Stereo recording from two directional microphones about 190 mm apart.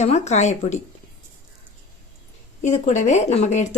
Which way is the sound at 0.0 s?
35° left (ahead or behind).